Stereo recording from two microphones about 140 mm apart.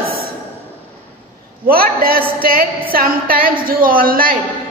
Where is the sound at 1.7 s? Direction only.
90° right.